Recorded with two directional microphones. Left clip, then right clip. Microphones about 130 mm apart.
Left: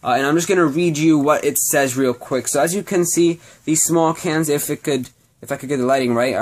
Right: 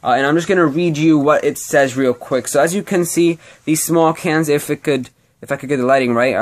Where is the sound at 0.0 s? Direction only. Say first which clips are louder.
Right 3 dB; 20° right (ahead or behind).